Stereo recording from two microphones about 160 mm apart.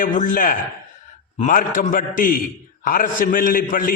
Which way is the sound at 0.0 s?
55° left (ahead or behind).